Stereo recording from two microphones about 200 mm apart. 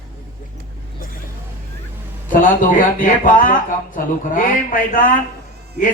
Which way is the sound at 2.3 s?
40° left (ahead or behind).